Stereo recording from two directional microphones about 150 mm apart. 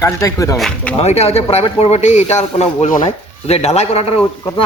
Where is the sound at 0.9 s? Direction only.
45° left (ahead or behind).